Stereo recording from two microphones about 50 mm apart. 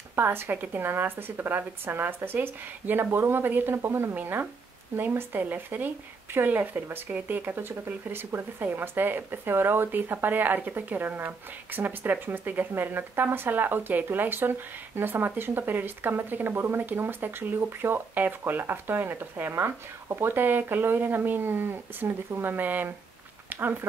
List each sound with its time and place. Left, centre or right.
0.1 s speech: right
19.5 s speech: right